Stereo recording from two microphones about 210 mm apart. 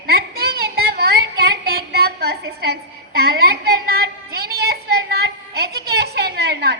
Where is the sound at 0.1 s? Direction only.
50° right (ahead or behind).